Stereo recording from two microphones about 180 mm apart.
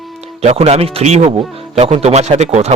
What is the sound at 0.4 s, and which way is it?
Speech, 35° right (ahead or behind).